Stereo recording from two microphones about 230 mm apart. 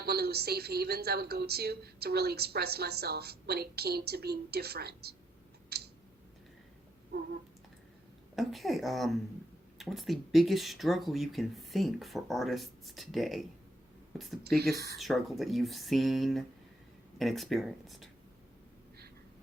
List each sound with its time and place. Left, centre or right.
0.0 s a woman's voice: right
5.6 s a sound: right
8.4 s speech: centre
14.9 s speech: centre